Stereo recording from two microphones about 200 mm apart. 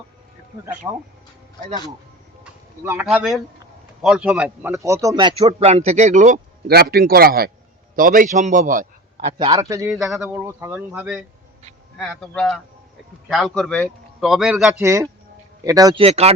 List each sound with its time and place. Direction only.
0.8 s speech: 15° right (ahead or behind)
2.4 s speech: 10° right (ahead or behind)
5.4 s a man's voice: 30° right (ahead or behind)
9.4 s speech: 20° right (ahead or behind)
11.9 s a man's voice: 5° left (ahead or behind)
14.8 s speech: 15° right (ahead or behind)
16.0 s speech: 30° right (ahead or behind)